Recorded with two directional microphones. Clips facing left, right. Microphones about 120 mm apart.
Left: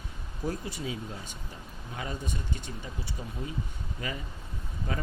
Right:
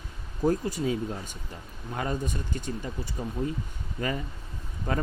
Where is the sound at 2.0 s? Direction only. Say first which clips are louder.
Right 6 dB; 45° right (ahead or behind).